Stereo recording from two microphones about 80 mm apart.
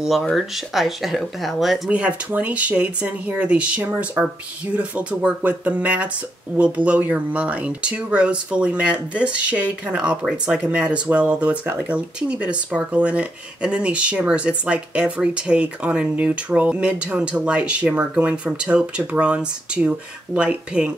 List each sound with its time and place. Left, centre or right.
0.0 s speech: centre
1.9 s speech: centre